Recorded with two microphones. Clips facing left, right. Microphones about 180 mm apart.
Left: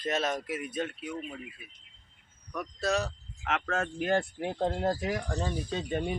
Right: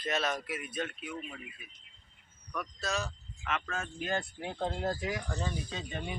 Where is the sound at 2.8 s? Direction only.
65° left (ahead or behind); by 6.0 s 45° left (ahead or behind).